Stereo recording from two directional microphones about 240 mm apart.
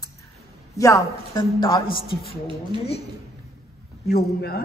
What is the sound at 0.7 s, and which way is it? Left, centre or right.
Speech, centre.